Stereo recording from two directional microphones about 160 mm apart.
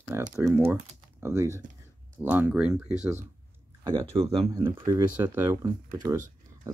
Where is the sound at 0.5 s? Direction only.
15° right (ahead or behind).